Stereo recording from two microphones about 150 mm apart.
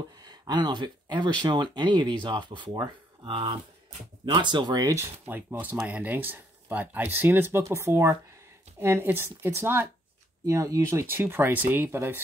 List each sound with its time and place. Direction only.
0.2 s speech: 30° right (ahead or behind)